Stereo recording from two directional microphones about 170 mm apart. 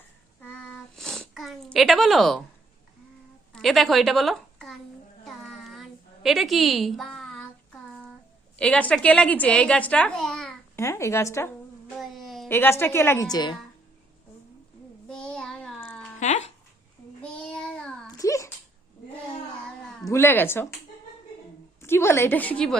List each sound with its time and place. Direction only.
0.7 s a sound: 5° left (ahead or behind)
3.5 s a woman's voice: centre (ahead or behind)
5.2 s a sound: centre (ahead or behind)
8.5 s a woman's voice: 5° left (ahead or behind)
10.8 s a woman's voice: 15° left (ahead or behind)
11.9 s a sound: centre (ahead or behind)
12.5 s a woman's voice: 15° left (ahead or behind)
13.3 s a woman's voice: 25° left (ahead or behind)
15.0 s child singing: 5° left (ahead or behind)
16.2 s music: 40° left (ahead or behind)
17.2 s child singing: 5° left (ahead or behind)
18.1 s a sound: 20° left (ahead or behind)
20.1 s a woman's voice: 15° left (ahead or behind)
21.8 s a woman's voice: 15° left (ahead or behind)